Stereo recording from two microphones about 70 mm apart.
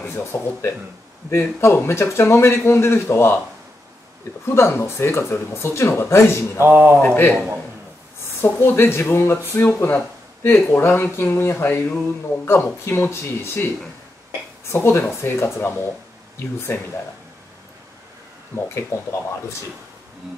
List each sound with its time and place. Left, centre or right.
0.0 s speech: left
4.5 s speech: left
6.6 s a man's voice: right
8.4 s speech: left
14.7 s speech: left
18.8 s speech: left